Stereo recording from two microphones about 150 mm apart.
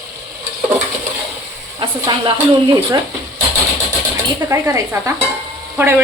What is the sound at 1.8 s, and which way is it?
Speech, 35° right (ahead or behind).